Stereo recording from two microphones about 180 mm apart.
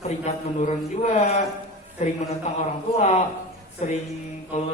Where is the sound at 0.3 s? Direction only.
40° left (ahead or behind).